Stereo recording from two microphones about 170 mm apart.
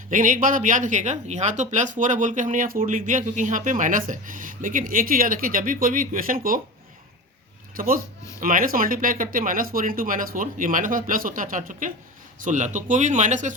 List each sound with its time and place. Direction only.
0.1 s speech: 50° right (ahead or behind)
7.8 s speech: 55° right (ahead or behind)